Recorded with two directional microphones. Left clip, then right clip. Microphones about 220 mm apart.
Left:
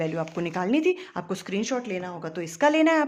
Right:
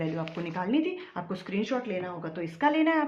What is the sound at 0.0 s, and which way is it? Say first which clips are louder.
Speech: left 5 dB; 50° left (ahead or behind).